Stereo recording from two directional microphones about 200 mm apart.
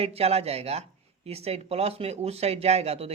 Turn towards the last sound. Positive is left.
turn(degrees=-30)  # may be behind; listen again after turning